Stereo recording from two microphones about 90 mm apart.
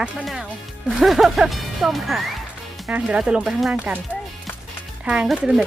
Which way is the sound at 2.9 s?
15° right (ahead or behind).